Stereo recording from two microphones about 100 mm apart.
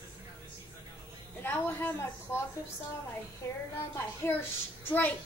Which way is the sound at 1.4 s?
20° left (ahead or behind).